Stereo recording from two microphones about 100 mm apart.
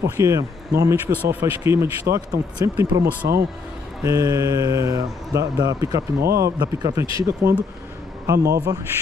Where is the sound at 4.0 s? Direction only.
30° right (ahead or behind).